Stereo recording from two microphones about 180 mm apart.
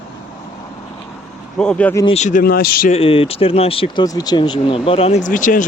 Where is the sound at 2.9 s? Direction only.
30° left (ahead or behind).